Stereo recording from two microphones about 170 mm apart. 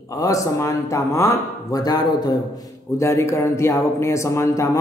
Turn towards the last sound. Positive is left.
turn(degrees=15)  # may be behind; listen again after turning